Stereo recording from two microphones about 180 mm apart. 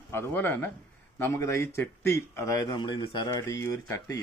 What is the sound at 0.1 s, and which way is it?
Speech, 10° left (ahead or behind).